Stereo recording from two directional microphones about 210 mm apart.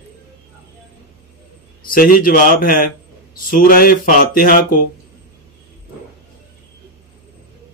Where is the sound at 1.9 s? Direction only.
40° left (ahead or behind).